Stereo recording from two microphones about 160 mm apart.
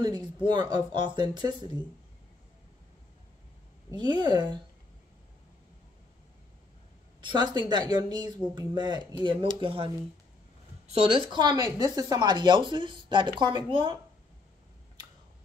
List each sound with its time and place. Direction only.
0.0 s speech: 30° right (ahead or behind)
3.9 s speech: 25° right (ahead or behind)
7.2 s speech: 25° right (ahead or behind)
11.1 s speech: 30° right (ahead or behind)